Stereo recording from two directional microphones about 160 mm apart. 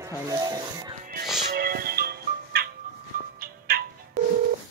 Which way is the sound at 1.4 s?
75° right (ahead or behind).